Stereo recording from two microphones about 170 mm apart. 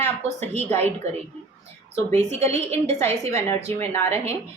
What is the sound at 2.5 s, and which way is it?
Speech, 40° right (ahead or behind).